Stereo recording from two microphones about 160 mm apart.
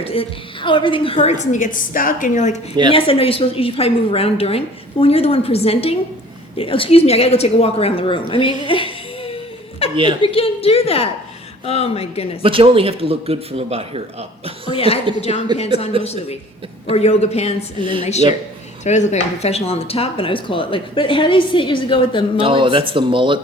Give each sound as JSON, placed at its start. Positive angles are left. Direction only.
{"t": 0.0, "sound": "a woman's voice", "side_deg": 35}
{"t": 2.9, "sound": "speech", "side_deg": 35}
{"t": 8.6, "sound": "music", "side_deg": 35}
{"t": 9.9, "sound": "speech", "side_deg": -30}
{"t": 10.2, "sound": "speech", "side_deg": 35}
{"t": 12.4, "sound": "speech", "side_deg": -35}
{"t": 14.7, "sound": "speech", "side_deg": 35}
{"t": 15.5, "sound": "speech", "side_deg": -25}
{"t": 16.9, "sound": "speech", "side_deg": 45}
{"t": 17.7, "sound": "speech", "side_deg": -30}
{"t": 18.0, "sound": "a woman's voice", "side_deg": 45}
{"t": 22.4, "sound": "speech", "side_deg": -35}